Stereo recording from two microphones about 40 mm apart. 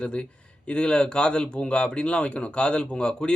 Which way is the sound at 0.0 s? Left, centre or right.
Left.